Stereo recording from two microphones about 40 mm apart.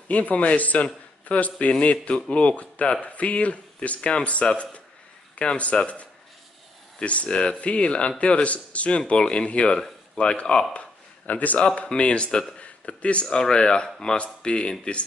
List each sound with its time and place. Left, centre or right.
0.1 s speech: left
7.0 s speech: left
10.7 s a sound: left
11.6 s speech: left
12.5 s a sound: left
13.4 s speech: centre
14.1 s speech: left